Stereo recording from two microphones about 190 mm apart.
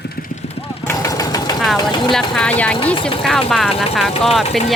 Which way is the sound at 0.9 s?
15° left (ahead or behind).